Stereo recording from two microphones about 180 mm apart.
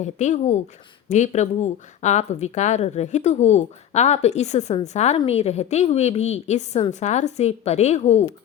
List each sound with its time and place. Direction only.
0.0 s a woman's voice: 40° left (ahead or behind)